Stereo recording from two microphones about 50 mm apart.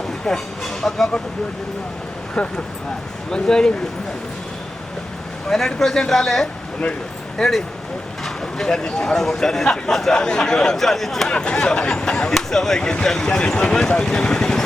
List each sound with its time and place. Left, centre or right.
0.3 s speech: centre
3.3 s speech: centre
5.8 s speech: centre
11.3 s speech: centre
12.3 s speech: centre
13.6 s speech: centre